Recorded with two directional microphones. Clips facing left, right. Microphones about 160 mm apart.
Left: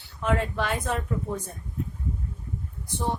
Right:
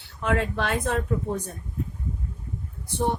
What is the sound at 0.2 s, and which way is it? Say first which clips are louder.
Speech: right 1 dB; 70° right (ahead or behind).